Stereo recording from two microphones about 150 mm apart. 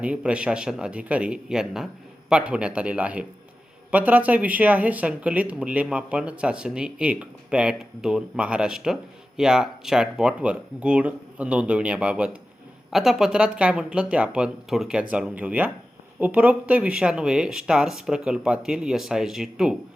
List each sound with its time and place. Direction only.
0.0 s speech: 10° right (ahead or behind)